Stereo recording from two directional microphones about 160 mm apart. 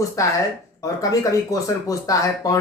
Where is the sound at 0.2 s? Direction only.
20° left (ahead or behind).